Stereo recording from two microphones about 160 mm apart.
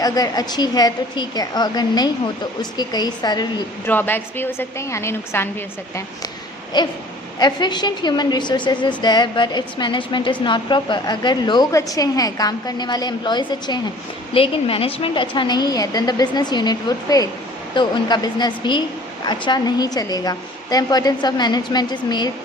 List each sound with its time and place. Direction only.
0.0 s a woman's voice: 25° left (ahead or behind)
3.8 s a woman's voice: 10° left (ahead or behind)
6.7 s a woman's voice: 25° left (ahead or behind)